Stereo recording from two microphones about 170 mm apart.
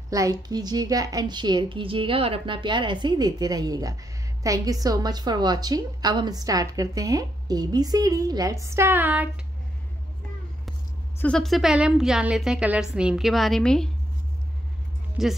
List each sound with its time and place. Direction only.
0.1 s a woman's voice: 20° right (ahead or behind)
11.1 s a woman's voice: 5° left (ahead or behind)
15.2 s a woman's voice: centre (ahead or behind)